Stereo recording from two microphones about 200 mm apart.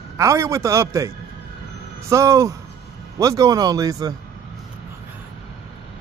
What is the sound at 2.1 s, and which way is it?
Speech, 15° right (ahead or behind).